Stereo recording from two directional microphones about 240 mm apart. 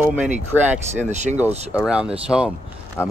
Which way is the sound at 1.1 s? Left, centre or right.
Right.